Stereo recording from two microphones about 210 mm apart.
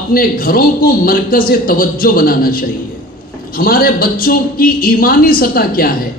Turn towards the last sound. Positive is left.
turn(degrees=45)  # may be behind; listen again after turning